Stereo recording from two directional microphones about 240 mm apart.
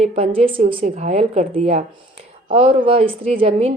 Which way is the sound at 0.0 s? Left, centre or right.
Right.